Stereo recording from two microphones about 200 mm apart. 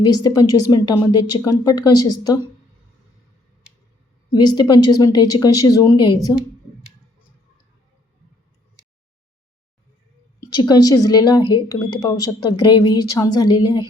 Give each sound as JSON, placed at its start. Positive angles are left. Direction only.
{"t": 0.0, "sound": "a woman's voice", "side_deg": 20}
{"t": 4.3, "sound": "a woman's voice", "side_deg": 20}
{"t": 10.4, "sound": "a woman's voice", "side_deg": 20}